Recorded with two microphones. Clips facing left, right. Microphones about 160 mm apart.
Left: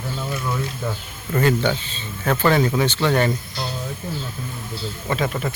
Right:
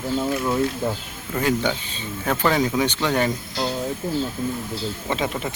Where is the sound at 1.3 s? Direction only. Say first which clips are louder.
Left 3 dB; 10° right (ahead or behind).